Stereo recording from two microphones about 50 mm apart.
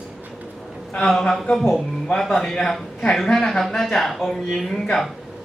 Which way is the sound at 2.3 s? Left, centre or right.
Centre.